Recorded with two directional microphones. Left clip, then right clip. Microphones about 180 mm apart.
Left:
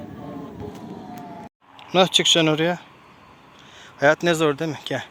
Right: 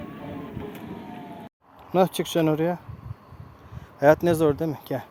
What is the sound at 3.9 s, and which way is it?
Speech, 15° right (ahead or behind).